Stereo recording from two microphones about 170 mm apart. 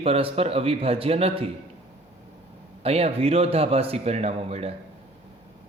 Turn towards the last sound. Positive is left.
turn(degrees=-35)  # may be behind; listen again after turning